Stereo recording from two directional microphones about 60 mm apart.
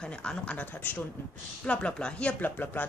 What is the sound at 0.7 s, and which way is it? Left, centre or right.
Speech, left.